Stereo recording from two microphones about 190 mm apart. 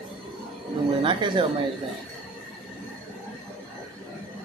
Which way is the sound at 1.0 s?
25° right (ahead or behind).